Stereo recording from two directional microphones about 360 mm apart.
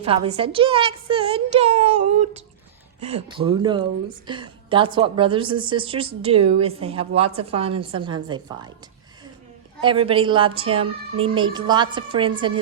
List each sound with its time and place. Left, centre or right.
0.0 s a woman's voice: centre
9.8 s a woman's voice: centre